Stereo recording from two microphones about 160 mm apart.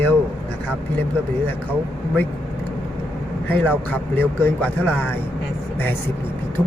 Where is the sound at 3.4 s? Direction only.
10° left (ahead or behind).